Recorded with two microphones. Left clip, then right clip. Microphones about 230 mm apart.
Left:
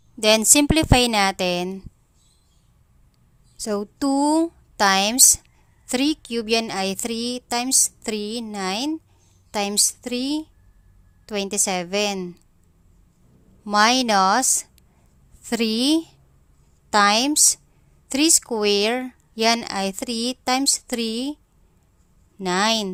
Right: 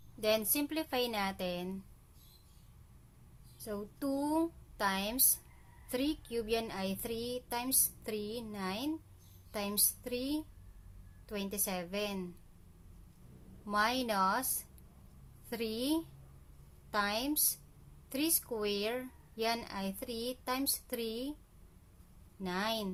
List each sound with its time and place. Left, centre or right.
0.2 s a woman's voice: left
3.6 s a woman's voice: left
13.7 s a woman's voice: left
22.4 s a woman's voice: left